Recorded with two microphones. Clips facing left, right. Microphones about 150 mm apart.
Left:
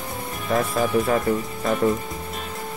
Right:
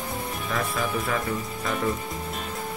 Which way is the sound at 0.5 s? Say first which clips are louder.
Left 8 dB; 40° left (ahead or behind).